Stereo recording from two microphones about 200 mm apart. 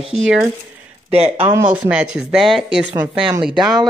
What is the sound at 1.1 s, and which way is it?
Speech, 30° right (ahead or behind).